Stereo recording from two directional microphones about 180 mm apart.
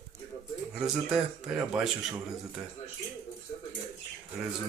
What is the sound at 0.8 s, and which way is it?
Speech, 5° right (ahead or behind).